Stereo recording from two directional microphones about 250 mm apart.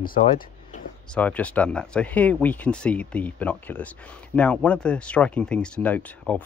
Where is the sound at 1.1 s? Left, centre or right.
Centre.